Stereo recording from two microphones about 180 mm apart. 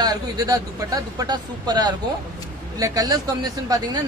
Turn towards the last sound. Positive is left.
turn(degrees=-20)  # may be behind; listen again after turning